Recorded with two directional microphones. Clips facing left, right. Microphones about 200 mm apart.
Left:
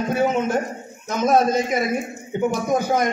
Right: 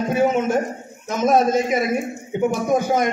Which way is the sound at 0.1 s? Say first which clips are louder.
Right 2 dB; centre (ahead or behind).